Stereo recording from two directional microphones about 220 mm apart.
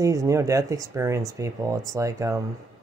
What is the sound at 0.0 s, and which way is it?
Speech, 15° right (ahead or behind).